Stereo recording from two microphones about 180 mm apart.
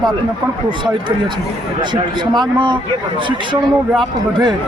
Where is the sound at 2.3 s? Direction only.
25° right (ahead or behind).